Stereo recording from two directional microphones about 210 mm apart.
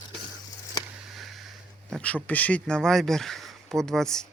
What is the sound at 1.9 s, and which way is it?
Speech, 5° left (ahead or behind).